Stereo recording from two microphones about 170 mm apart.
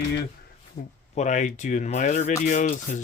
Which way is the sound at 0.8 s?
45° left (ahead or behind).